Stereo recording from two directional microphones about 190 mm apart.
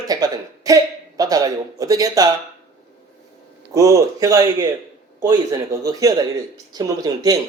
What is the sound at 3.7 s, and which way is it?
A man's voice, 15° right (ahead or behind).